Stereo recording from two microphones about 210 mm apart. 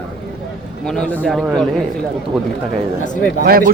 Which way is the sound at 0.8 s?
5° left (ahead or behind).